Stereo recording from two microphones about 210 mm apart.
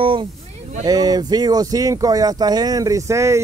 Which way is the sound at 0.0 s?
25° right (ahead or behind).